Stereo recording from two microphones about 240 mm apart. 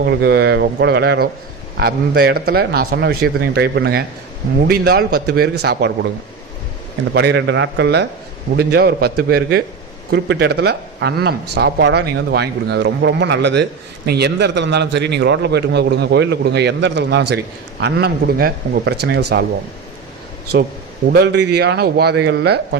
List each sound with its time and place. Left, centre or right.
0.0 s speech: right
7.1 s speech: right
21.1 s speech: right